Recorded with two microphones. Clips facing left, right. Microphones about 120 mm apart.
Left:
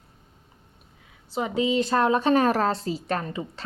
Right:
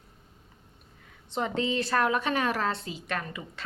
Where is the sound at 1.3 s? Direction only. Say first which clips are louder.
Left 4 dB; 5° left (ahead or behind).